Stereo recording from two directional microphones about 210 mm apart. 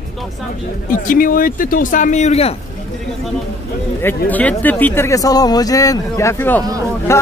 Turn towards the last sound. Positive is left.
turn(degrees=10)  # may be behind; listen again after turning